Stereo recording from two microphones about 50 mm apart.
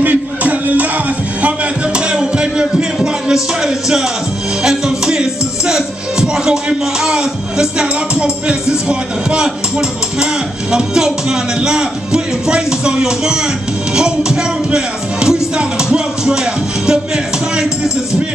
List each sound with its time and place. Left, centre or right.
0.0 s music: right
1.4 s a sound: right
4.6 s music: centre